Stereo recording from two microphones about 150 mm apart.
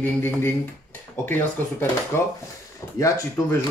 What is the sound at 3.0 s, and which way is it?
Speech, 20° left (ahead or behind).